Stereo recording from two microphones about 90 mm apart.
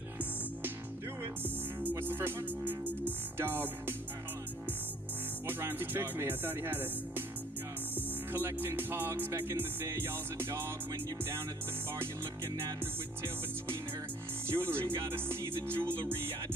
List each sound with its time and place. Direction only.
1.2 s music: 20° right (ahead or behind)
5.5 s music: 25° right (ahead or behind)
14.5 s music: 25° right (ahead or behind)